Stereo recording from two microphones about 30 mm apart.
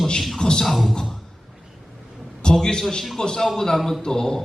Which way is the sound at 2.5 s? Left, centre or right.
Left.